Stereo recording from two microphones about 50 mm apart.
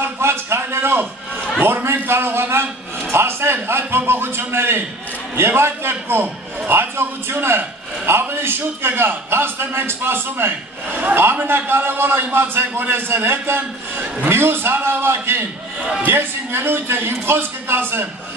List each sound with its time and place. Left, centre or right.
0.0 s a sound: right
1.6 s a man's voice: right
11.1 s a man's voice: right